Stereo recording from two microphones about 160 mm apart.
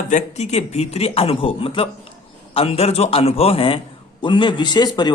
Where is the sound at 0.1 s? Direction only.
45° left (ahead or behind).